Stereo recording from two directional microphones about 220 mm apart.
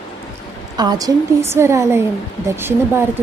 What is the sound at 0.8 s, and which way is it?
A woman's voice, 15° right (ahead or behind).